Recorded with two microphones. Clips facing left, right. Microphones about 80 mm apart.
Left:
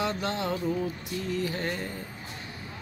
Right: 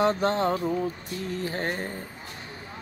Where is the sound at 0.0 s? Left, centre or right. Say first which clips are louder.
Right 7 dB; right.